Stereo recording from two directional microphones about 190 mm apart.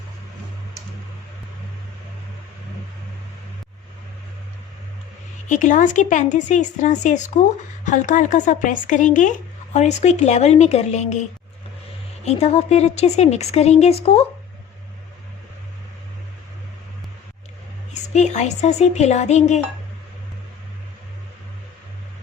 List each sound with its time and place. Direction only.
5.5 s speech: 40° left (ahead or behind)
18.1 s speech: 35° left (ahead or behind)